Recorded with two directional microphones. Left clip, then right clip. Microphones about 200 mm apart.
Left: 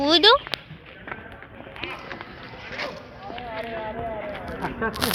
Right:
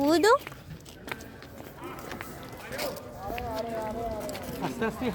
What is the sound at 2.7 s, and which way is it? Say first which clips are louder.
Run: left 2 dB; 50° right (ahead or behind).